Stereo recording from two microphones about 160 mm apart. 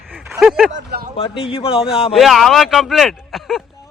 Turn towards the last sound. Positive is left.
turn(degrees=0)  # may be behind; listen again after turning